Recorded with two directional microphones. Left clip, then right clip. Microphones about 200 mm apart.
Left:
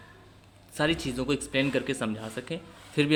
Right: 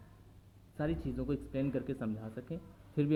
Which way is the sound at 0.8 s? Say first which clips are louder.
Left 10 dB; 20° left (ahead or behind).